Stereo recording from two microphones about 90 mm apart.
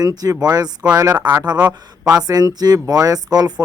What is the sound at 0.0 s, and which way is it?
Speech, 45° right (ahead or behind).